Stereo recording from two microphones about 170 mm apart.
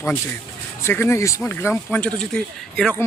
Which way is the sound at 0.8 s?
15° left (ahead or behind).